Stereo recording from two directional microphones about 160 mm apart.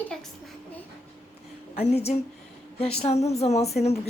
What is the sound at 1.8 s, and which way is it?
A woman's voice, 40° left (ahead or behind).